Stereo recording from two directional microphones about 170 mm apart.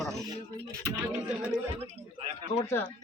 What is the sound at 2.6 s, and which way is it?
Speech, 10° left (ahead or behind).